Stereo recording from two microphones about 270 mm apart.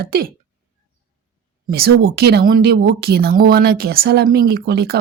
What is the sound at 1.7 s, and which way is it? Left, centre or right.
Speech, right.